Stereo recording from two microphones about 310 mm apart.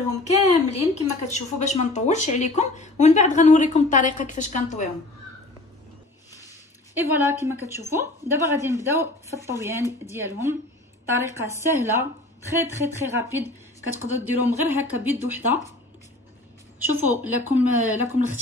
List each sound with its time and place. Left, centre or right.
0.1 s speech: left
6.9 s a woman's voice: centre
14.2 s a woman's voice: centre
16.9 s a woman's voice: centre